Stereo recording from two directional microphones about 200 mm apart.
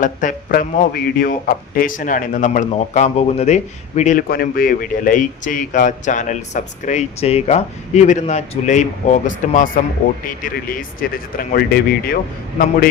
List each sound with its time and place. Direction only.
0.0 s speech: 40° left (ahead or behind)
4.3 s a man's voice: 50° left (ahead or behind)